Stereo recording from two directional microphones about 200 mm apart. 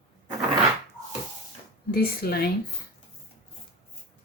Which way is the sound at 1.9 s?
50° left (ahead or behind).